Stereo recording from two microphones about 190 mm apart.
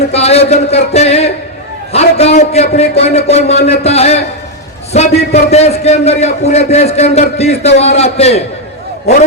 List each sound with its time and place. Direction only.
0.1 s a man's voice: 35° left (ahead or behind)